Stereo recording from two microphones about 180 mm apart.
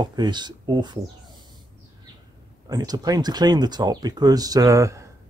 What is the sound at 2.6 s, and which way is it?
Speech, 20° right (ahead or behind).